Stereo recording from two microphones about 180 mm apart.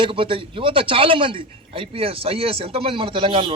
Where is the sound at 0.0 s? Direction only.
30° right (ahead or behind).